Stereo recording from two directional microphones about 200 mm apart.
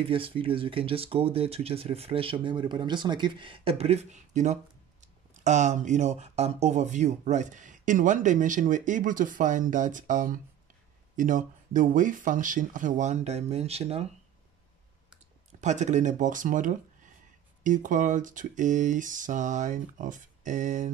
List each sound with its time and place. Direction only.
0.0 s speech: 25° right (ahead or behind)
15.6 s speech: 35° right (ahead or behind)